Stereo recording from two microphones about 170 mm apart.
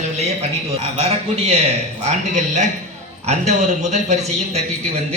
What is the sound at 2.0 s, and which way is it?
Speech, 45° right (ahead or behind).